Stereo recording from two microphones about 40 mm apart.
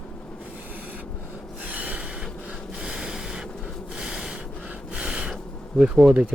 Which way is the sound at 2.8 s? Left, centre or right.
Centre.